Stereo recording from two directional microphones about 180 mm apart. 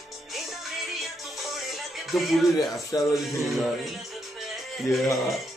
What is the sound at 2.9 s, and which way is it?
Speech, 20° left (ahead or behind).